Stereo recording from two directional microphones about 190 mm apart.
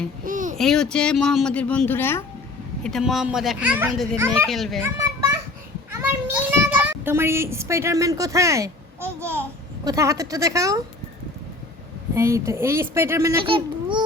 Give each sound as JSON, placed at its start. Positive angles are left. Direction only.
{"t": 0.3, "sound": "a sound", "side_deg": -45}
{"t": 0.5, "sound": "speech", "side_deg": 0}
{"t": 2.8, "sound": "speech", "side_deg": 0}
{"t": 4.8, "sound": "children playing", "side_deg": -15}
{"t": 5.9, "sound": "a child's voice", "side_deg": -10}
{"t": 12.1, "sound": "speech", "side_deg": -15}
{"t": 13.4, "sound": "a child's voice", "side_deg": -25}